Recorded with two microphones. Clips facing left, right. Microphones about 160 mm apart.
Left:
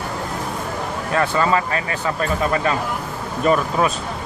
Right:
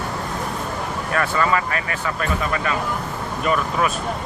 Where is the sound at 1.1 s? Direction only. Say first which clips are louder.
Left 2 dB; 25° left (ahead or behind).